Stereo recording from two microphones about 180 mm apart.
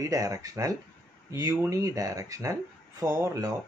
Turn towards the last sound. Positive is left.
turn(degrees=-15)  # may be behind; listen again after turning